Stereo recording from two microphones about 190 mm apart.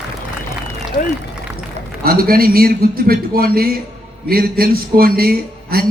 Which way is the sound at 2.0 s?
50° right (ahead or behind).